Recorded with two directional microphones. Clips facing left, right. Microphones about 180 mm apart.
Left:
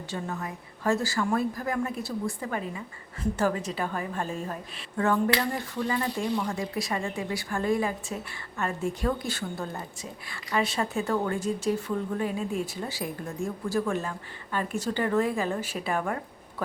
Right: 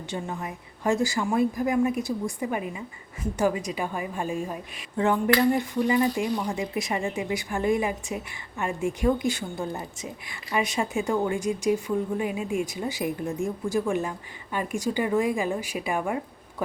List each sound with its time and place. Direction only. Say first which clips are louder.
0.1 s a woman's voice: right 1 dB; 15° right (ahead or behind)